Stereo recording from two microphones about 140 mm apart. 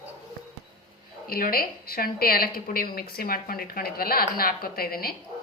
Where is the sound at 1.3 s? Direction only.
90° left.